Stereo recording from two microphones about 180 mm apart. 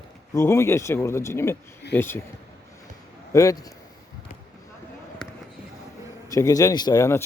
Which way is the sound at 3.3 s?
20° left (ahead or behind).